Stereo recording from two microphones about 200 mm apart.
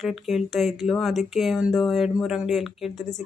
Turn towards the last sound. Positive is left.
turn(degrees=0)  # may be behind; listen again after turning